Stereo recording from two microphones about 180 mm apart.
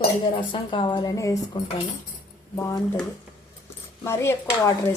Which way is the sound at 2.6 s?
20° left (ahead or behind).